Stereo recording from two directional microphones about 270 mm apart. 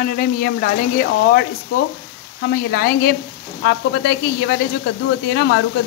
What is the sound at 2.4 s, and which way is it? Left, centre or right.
Speech, left.